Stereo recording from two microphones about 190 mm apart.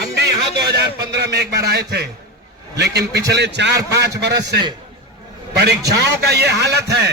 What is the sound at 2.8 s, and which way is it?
A man's voice, 60° right (ahead or behind).